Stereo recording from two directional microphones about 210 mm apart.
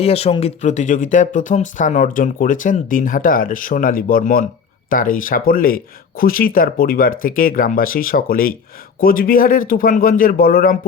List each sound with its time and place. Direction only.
0.0 s speech: 30° left (ahead or behind); by 10.8 s 45° left (ahead or behind)